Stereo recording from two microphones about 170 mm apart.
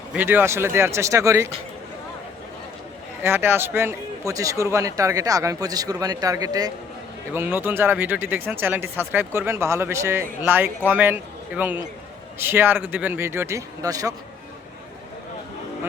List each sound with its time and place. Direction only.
0.1 s speech: 10° right (ahead or behind)
3.2 s a man's voice: 15° right (ahead or behind)
7.3 s speech: 10° right (ahead or behind)